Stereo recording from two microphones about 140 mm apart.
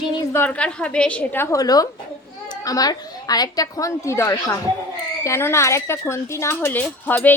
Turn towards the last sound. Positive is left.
turn(degrees=15)  # may be behind; listen again after turning